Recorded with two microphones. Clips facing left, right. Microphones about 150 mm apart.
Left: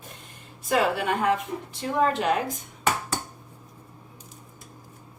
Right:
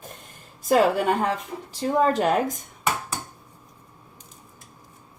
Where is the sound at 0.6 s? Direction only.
40° right (ahead or behind).